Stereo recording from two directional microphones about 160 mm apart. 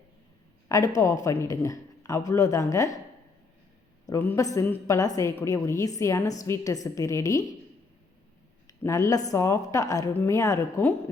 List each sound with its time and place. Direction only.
0.7 s a woman's voice: 20° left (ahead or behind)
4.0 s a woman's voice: 15° left (ahead or behind)
8.6 s a woman's voice: 20° left (ahead or behind)